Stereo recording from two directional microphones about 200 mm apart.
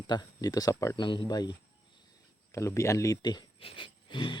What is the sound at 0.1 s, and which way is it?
Speech, 20° left (ahead or behind).